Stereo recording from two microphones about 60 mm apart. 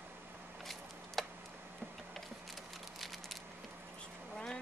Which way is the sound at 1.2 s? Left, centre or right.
Centre.